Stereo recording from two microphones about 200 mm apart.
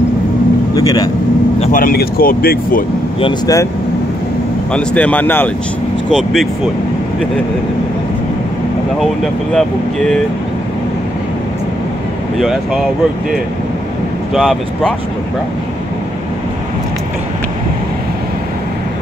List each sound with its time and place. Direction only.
0.7 s speech: 20° left (ahead or behind)
1.6 s speech: 40° left (ahead or behind)
3.2 s speech: 20° left (ahead or behind)
4.7 s speech: 5° left (ahead or behind)
9.0 s speech: centre (ahead or behind)
12.4 s speech: centre (ahead or behind)
14.3 s speech: centre (ahead or behind)